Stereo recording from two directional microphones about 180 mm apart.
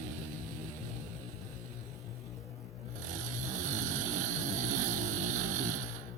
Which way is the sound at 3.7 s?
45° right (ahead or behind).